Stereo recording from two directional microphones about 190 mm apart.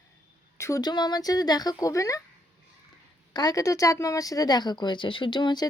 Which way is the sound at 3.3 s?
20° left (ahead or behind).